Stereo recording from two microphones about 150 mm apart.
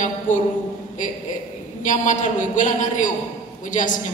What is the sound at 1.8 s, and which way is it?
A man's voice, 55° left (ahead or behind).